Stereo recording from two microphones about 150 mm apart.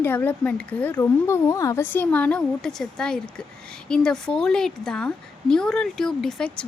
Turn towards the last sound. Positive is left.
turn(degrees=5)  # may be behind; listen again after turning